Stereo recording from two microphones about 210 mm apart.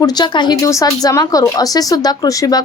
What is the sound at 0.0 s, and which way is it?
A woman's voice, 20° left (ahead or behind).